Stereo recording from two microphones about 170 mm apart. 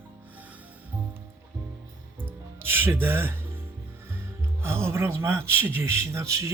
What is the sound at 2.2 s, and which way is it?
Music, 10° right (ahead or behind).